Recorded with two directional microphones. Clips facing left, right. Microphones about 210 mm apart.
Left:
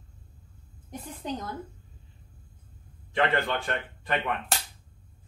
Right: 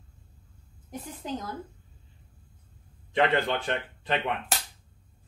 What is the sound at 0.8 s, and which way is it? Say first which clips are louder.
Speech: left 1 dB; centre (ahead or behind).